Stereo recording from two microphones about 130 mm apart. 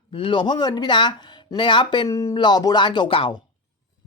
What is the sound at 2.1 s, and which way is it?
Speech, 25° left (ahead or behind).